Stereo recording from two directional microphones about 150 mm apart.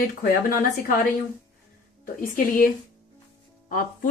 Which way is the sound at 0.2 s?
70° left (ahead or behind).